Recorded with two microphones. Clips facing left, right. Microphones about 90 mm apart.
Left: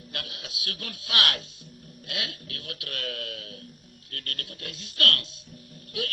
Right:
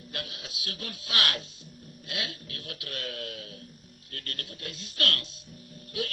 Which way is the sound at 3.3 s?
30° right (ahead or behind).